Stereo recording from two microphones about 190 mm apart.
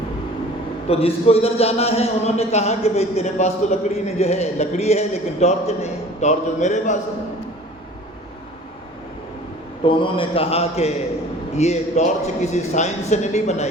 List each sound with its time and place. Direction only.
0.9 s a man's voice: 30° left (ahead or behind)
9.8 s a man's voice: 25° left (ahead or behind)